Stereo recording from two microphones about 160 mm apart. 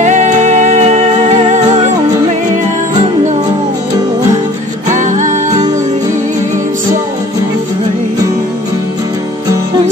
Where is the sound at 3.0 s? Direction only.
45° right (ahead or behind).